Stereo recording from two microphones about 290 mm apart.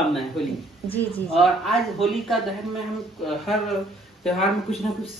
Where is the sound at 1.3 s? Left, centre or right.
Centre.